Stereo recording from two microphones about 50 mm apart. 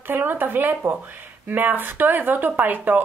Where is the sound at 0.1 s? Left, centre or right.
Right.